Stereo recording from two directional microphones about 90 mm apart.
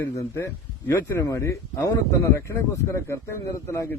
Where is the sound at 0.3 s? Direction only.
30° left (ahead or behind).